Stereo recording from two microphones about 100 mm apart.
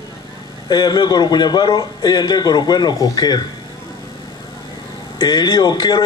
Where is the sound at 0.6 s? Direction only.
45° left (ahead or behind).